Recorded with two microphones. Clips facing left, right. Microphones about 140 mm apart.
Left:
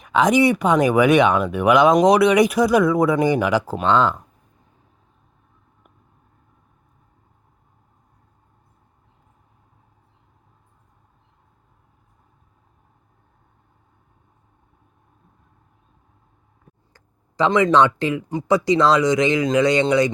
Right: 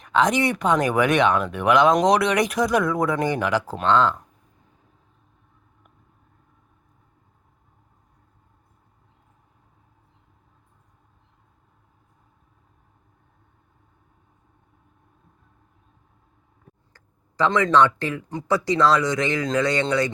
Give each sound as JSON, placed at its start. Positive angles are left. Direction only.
{"t": 0.0, "sound": "speech", "side_deg": 10}
{"t": 16.9, "sound": "speech", "side_deg": 15}